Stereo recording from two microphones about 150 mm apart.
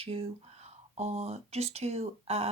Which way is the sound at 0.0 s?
40° right (ahead or behind).